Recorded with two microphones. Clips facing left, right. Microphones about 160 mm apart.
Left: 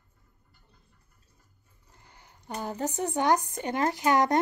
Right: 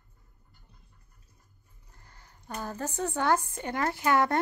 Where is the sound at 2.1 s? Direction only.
15° left (ahead or behind).